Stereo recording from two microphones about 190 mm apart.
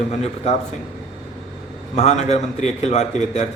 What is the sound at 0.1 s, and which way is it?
Speech, 35° left (ahead or behind).